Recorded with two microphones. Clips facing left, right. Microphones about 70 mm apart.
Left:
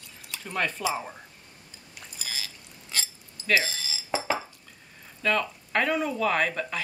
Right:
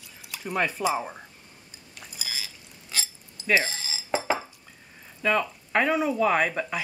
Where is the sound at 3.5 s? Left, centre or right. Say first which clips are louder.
Right 1 dB; right.